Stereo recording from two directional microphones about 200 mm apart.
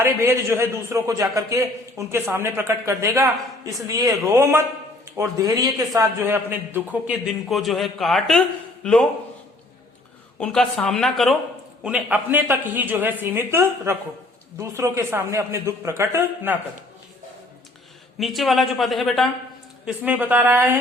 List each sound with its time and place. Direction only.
0.0 s a man's voice: 15° right (ahead or behind); by 9.0 s 5° left (ahead or behind)
10.4 s a man's voice: 5° left (ahead or behind)
18.2 s a man's voice: centre (ahead or behind)